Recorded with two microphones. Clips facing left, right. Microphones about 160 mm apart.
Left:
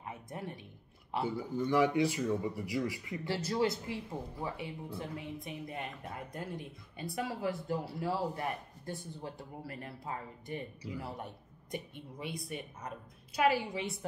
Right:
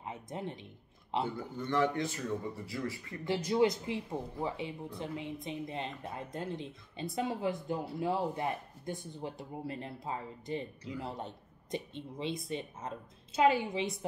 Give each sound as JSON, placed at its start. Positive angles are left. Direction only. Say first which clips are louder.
{"t": 0.0, "sound": "speech", "louder": "right 2 dB", "side_deg": -20}
{"t": 1.2, "sound": "speech", "louder": "left 3 dB", "side_deg": 10}
{"t": 3.3, "sound": "a woman's voice", "louder": "right 4 dB", "side_deg": -15}